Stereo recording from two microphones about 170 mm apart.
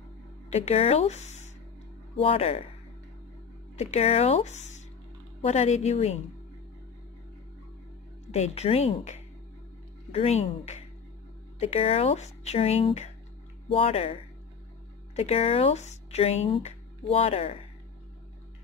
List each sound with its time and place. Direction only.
0.5 s speech: 40° left (ahead or behind)
3.7 s speech: 40° left (ahead or behind)
8.3 s speech: 40° left (ahead or behind)